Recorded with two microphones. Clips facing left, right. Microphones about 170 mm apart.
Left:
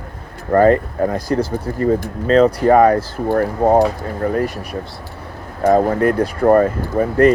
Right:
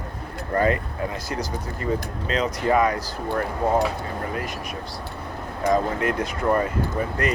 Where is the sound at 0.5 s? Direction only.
50° left (ahead or behind).